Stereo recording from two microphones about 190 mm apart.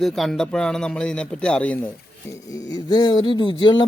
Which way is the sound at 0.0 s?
Centre (ahead or behind).